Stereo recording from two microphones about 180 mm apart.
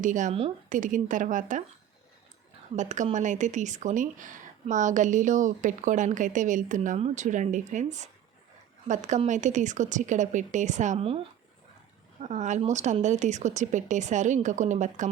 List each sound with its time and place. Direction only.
0.0 s speech: 45° right (ahead or behind)
2.7 s a woman's voice: 40° right (ahead or behind)